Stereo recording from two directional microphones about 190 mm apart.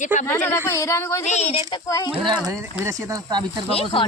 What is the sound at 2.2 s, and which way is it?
Speech, 25° right (ahead or behind).